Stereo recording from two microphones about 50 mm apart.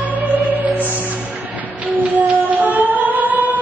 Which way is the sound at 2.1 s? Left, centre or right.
Right.